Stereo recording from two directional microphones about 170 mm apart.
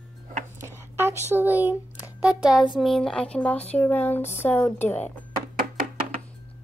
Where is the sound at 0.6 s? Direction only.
15° right (ahead or behind).